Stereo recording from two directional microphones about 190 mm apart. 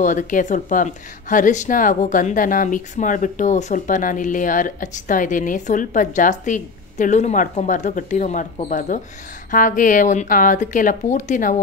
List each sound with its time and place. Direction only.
0.0 s speech: 40° left (ahead or behind)